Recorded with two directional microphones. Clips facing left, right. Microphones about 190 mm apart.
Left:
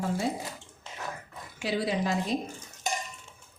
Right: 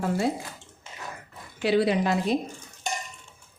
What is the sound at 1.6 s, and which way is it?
Speech, 65° right (ahead or behind).